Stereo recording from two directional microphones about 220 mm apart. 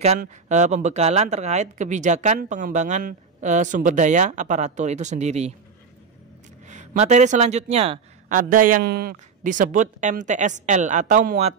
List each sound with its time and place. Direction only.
0.0 s speech: 30° right (ahead or behind)
6.7 s speech: 35° right (ahead or behind)